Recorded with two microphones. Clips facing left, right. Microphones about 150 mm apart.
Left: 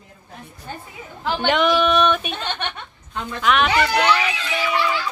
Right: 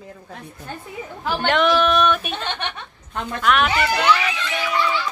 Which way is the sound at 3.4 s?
Centre (ahead or behind).